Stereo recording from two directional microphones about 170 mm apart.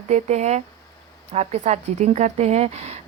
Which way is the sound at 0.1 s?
40° right (ahead or behind).